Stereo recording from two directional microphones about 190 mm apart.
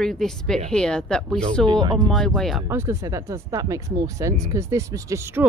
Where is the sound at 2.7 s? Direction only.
15° right (ahead or behind).